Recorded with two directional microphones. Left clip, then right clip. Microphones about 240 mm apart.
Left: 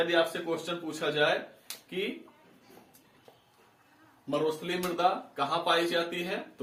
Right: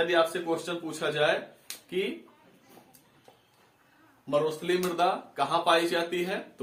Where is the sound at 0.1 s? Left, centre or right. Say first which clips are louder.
Right 2 dB; centre.